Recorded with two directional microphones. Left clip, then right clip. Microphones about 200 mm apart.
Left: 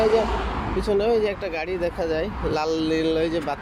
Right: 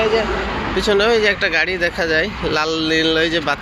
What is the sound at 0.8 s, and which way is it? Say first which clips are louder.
Speech: right 7 dB; centre (ahead or behind).